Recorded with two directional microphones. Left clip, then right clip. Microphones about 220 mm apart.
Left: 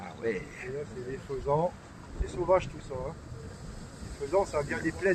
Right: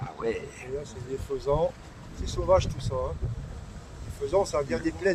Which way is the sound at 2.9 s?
30° right (ahead or behind).